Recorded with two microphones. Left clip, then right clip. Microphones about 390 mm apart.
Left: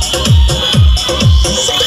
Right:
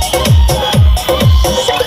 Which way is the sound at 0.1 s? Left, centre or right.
Centre.